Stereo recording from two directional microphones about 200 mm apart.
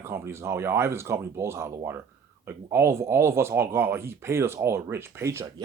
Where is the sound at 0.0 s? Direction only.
15° right (ahead or behind).